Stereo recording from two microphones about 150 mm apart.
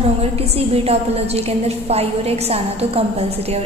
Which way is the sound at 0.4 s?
40° right (ahead or behind).